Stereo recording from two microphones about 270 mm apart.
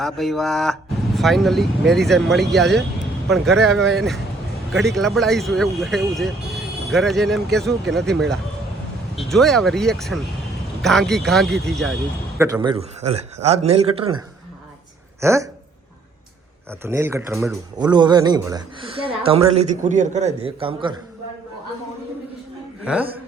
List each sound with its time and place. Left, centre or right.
0.0 s speech: centre
9.1 s speech: centre
12.4 s a man's voice: centre
15.2 s speech: centre
16.8 s speech: centre
17.7 s a man's voice: centre
22.8 s speech: centre